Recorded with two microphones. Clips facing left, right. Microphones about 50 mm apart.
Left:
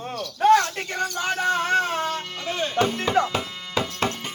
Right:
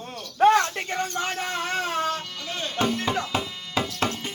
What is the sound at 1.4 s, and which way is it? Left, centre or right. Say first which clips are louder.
Music: left 6 dB; centre.